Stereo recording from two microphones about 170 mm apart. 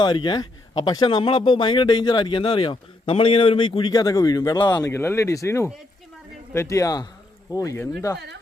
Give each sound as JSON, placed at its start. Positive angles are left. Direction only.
{"t": 0.0, "sound": "speech", "side_deg": 25}